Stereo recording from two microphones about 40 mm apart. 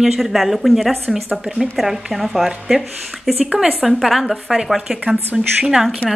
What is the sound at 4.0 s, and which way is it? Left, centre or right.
Speech, centre.